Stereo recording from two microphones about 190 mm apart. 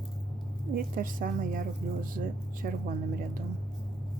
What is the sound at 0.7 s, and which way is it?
A woman's voice, 45° right (ahead or behind).